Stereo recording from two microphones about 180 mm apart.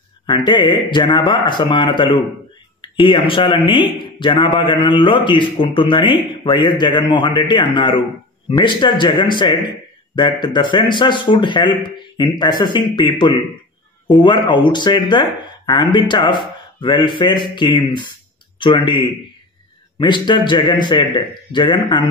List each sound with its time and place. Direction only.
0.4 s a man's voice: 25° left (ahead or behind)